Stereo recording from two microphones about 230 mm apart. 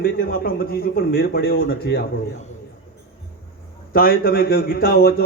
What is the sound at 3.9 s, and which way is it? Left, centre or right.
A man's voice, left.